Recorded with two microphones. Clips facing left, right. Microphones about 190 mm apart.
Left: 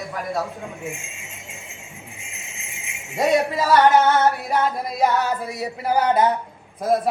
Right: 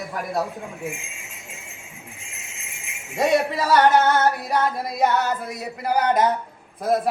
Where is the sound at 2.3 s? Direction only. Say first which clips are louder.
Left 2 dB; centre (ahead or behind).